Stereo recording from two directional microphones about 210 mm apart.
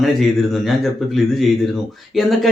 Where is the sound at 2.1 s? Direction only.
Centre (ahead or behind).